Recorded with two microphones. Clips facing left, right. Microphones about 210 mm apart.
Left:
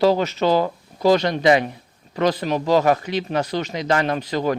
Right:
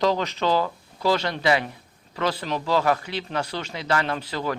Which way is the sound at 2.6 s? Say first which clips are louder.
Left 5 dB; 15° left (ahead or behind).